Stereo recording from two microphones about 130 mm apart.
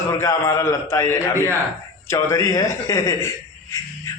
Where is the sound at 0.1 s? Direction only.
25° left (ahead or behind).